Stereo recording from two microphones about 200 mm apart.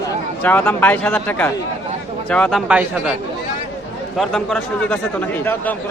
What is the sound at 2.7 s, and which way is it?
Speech, 5° right (ahead or behind).